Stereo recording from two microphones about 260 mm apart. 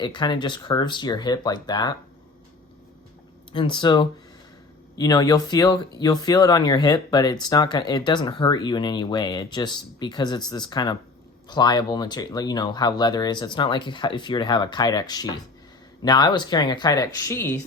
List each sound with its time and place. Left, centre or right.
0.0 s speech: centre
3.5 s speech: centre